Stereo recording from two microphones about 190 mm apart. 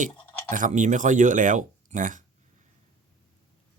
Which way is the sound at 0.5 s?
40° right (ahead or behind).